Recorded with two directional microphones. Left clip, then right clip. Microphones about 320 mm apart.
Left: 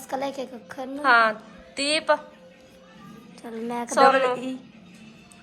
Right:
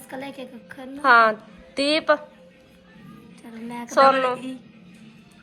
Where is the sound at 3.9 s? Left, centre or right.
Centre.